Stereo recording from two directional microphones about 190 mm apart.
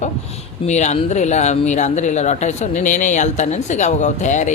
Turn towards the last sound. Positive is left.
turn(degrees=40)  # may be behind; listen again after turning